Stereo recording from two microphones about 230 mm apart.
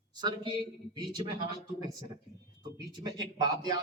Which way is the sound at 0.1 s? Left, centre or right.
Centre.